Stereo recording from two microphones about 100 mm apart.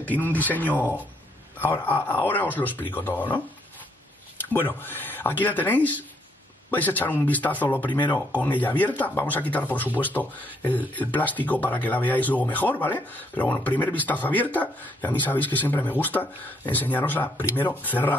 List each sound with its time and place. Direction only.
0.0 s speech: 15° left (ahead or behind)
4.5 s speech: 20° left (ahead or behind)